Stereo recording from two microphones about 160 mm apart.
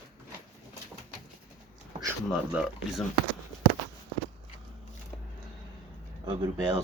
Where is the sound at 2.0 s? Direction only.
5° right (ahead or behind).